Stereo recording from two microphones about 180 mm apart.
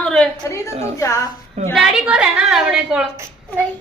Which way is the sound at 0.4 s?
15° left (ahead or behind).